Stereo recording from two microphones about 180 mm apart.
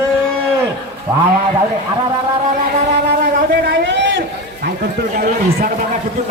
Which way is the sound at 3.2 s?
50° right (ahead or behind).